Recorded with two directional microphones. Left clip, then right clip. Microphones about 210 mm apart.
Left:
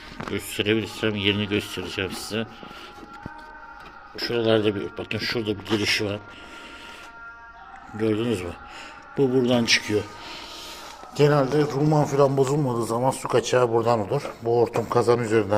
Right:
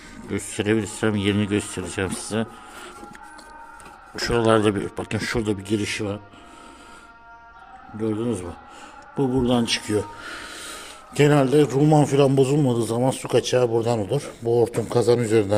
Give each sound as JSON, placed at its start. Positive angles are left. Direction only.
{"t": 0.3, "sound": "speech", "side_deg": -35}
{"t": 4.1, "sound": "speech", "side_deg": -40}
{"t": 7.9, "sound": "speech", "side_deg": -10}
{"t": 10.6, "sound": "a man's voice", "side_deg": -45}
{"t": 13.4, "sound": "speech", "side_deg": -25}